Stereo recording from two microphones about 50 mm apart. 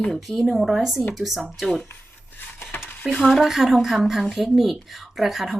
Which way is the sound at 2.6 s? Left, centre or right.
Left.